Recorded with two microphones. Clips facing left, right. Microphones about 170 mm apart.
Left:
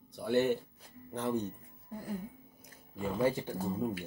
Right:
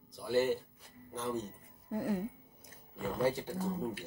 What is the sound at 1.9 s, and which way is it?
Speech, 75° right (ahead or behind).